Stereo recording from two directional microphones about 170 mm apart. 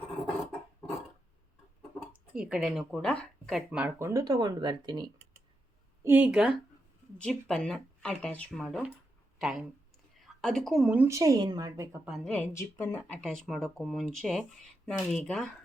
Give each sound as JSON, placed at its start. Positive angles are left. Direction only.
{"t": 2.3, "sound": "speech", "side_deg": -5}
{"t": 6.0, "sound": "speech", "side_deg": -10}
{"t": 7.2, "sound": "speech", "side_deg": 5}
{"t": 12.0, "sound": "speech", "side_deg": -5}
{"t": 12.3, "sound": "speech", "side_deg": 10}
{"t": 13.2, "sound": "speech", "side_deg": 0}